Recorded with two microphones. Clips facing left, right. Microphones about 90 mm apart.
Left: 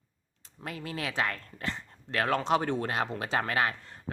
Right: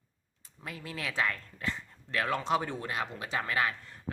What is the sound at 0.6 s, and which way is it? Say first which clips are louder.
Speech: left 3 dB; 50° left (ahead or behind).